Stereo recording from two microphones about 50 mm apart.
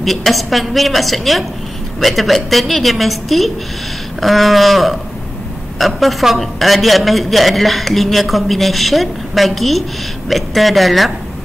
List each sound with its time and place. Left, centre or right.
0.0 s a man's voice: centre